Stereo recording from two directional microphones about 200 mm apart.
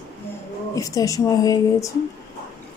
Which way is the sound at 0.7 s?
15° left (ahead or behind).